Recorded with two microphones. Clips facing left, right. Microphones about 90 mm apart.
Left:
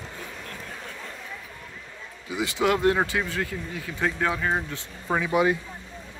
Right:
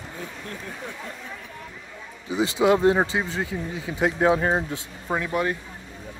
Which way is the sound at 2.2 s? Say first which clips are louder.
Right 4 dB; 25° right (ahead or behind).